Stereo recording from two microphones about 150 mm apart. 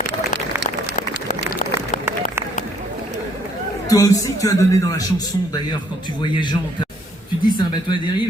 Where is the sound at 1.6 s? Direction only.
60° left (ahead or behind).